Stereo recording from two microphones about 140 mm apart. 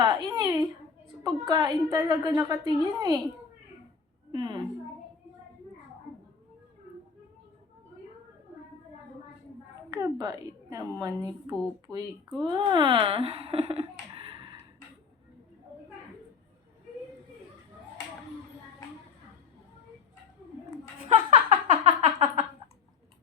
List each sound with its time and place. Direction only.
0.0 s a sound: 30° right (ahead or behind)
1.2 s a woman's voice: 30° right (ahead or behind)
4.3 s a woman's voice: 35° right (ahead or behind)
9.9 s a woman's voice: 30° right (ahead or behind)
21.3 s music: 35° right (ahead or behind)